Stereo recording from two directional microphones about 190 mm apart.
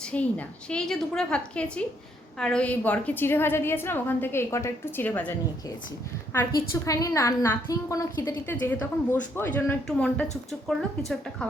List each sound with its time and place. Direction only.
0.1 s a woman's voice: 5° left (ahead or behind)
6.3 s a woman's voice: 20° left (ahead or behind); by 11.4 s centre (ahead or behind)